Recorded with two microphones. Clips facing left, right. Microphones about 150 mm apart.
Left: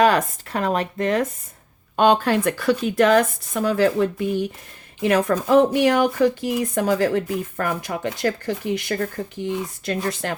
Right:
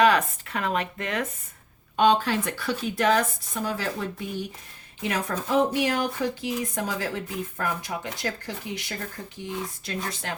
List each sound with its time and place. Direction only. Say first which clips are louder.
0.0 s speech: left 3 dB; 40° left (ahead or behind)
2.0 s speech: left 4 dB; 50° left (ahead or behind); by 10.3 s 70° left (ahead or behind)